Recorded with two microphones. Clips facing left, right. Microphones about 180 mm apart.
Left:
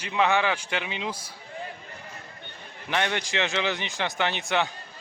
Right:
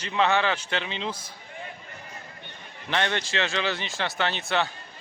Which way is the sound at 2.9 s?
15° left (ahead or behind).